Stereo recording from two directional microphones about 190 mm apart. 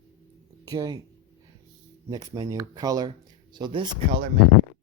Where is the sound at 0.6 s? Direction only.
20° right (ahead or behind).